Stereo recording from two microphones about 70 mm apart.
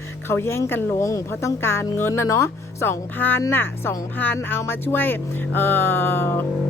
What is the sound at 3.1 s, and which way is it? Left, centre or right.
Speech, left.